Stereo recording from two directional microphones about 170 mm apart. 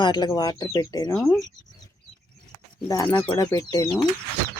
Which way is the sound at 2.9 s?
20° left (ahead or behind).